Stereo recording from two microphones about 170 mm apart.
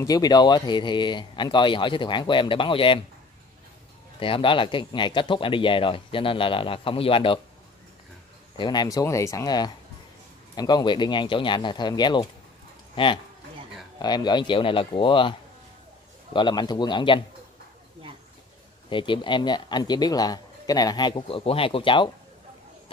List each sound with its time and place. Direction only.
0.0 s a man's voice: 20° left (ahead or behind)
4.2 s speech: 30° left (ahead or behind)
8.5 s a man's voice: 25° left (ahead or behind)
16.3 s a man's voice: 25° left (ahead or behind)
18.9 s a man's voice: 30° left (ahead or behind)